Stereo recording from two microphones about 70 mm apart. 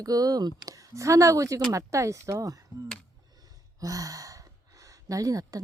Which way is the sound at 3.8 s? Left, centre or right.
Right.